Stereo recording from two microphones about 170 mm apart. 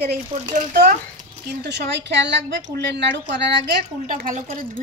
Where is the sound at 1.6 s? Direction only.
90° right.